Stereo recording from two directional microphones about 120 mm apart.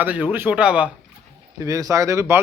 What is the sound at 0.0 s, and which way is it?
Speech, 15° right (ahead or behind).